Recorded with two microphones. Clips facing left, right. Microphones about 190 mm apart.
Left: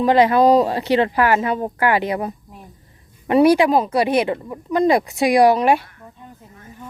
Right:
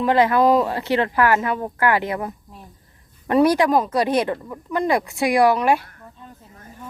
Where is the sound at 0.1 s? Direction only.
20° left (ahead or behind).